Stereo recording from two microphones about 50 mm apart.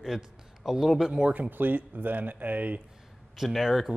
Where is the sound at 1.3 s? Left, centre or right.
Right.